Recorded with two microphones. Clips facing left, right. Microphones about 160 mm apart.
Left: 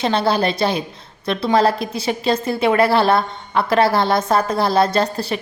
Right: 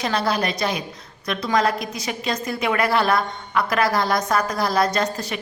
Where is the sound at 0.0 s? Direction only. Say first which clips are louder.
Left 5 dB; 30° left (ahead or behind).